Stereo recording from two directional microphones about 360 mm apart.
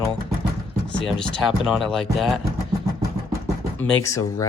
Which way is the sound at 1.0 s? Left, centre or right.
Centre.